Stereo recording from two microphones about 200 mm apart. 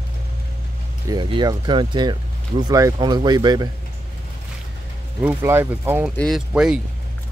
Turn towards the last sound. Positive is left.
turn(degrees=-5)  # may be behind; listen again after turning